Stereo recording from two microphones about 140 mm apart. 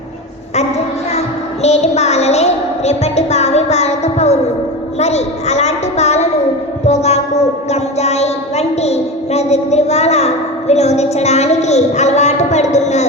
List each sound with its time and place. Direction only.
1.6 s a child's voice: 50° left (ahead or behind)